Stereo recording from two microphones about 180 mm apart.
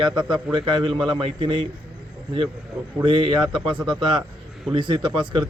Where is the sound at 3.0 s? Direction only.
25° right (ahead or behind).